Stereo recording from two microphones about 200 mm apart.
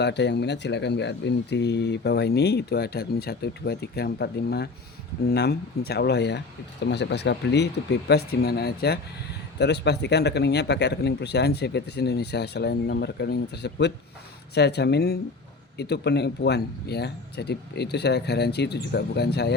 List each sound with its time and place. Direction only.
0.0 s speech: 60° left (ahead or behind)